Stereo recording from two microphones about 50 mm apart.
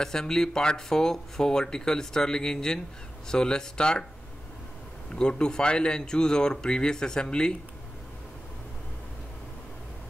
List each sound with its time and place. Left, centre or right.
0.0 s speech: centre
5.1 s speech: centre